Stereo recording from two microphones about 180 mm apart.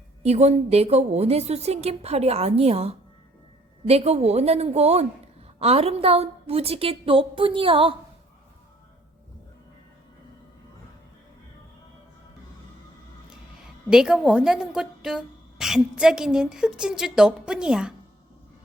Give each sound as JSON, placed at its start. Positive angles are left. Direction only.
{"t": 0.2, "sound": "a woman's voice", "side_deg": -35}
{"t": 13.3, "sound": "a woman's voice", "side_deg": -5}